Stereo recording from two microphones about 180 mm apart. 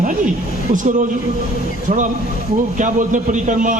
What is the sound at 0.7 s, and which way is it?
Speech, 45° right (ahead or behind).